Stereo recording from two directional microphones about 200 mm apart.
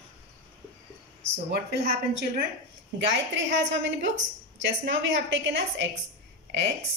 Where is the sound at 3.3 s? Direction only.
65° right (ahead or behind).